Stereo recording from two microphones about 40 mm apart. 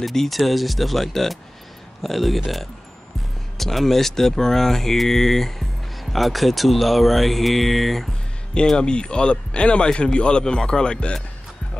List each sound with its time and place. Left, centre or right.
0.0 s speech: centre
8.6 s speech: left